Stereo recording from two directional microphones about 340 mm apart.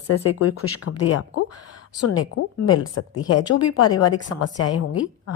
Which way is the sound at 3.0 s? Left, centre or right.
Left.